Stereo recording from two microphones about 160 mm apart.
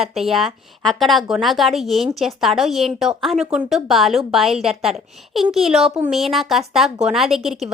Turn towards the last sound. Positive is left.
turn(degrees=0)  # may be behind; listen again after turning